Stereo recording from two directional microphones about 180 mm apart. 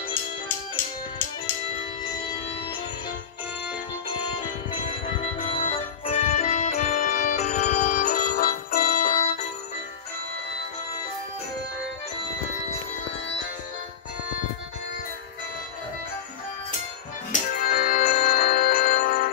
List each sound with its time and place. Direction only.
4.8 s music: 35° left (ahead or behind)
17.3 s music: 50° left (ahead or behind)